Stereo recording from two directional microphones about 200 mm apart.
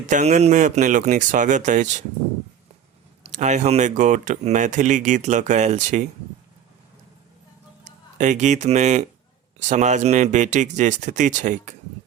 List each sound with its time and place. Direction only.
0.1 s speech: 35° right (ahead or behind)
3.3 s speech: 35° right (ahead or behind)
7.9 s speech: 35° right (ahead or behind)